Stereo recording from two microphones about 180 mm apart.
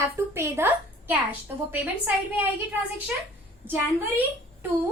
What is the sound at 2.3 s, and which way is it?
A woman's voice, 10° right (ahead or behind).